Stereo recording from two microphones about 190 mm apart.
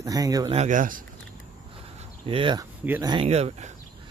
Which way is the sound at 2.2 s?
25° right (ahead or behind).